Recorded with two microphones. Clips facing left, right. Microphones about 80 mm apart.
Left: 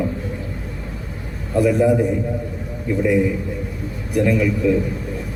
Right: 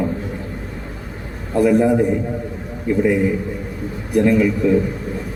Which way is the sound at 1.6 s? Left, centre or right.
Right.